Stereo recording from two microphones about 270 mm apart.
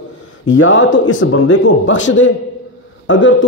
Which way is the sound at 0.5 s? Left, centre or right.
Left.